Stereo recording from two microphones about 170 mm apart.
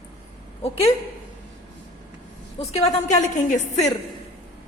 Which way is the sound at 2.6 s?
40° left (ahead or behind).